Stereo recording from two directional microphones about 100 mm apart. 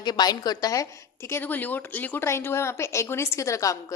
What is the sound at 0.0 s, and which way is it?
A woman's voice, 45° left (ahead or behind).